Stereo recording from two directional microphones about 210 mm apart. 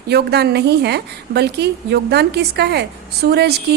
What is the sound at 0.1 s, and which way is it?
A woman's voice, 50° right (ahead or behind).